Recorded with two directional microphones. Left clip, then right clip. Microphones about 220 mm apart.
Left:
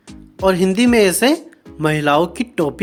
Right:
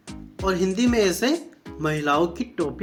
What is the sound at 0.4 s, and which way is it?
Speech, 45° left (ahead or behind).